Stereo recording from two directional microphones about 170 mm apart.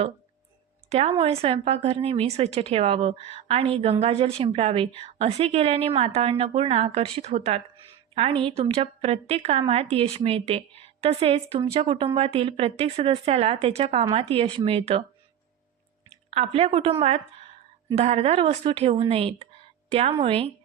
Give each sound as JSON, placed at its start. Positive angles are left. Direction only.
{"t": 0.9, "sound": "a woman's voice", "side_deg": -40}
{"t": 16.3, "sound": "a woman's voice", "side_deg": -35}